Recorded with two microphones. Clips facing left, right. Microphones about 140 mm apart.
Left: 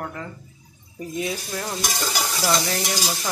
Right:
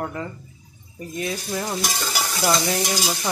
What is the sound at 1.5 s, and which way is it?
Speech, 10° right (ahead or behind).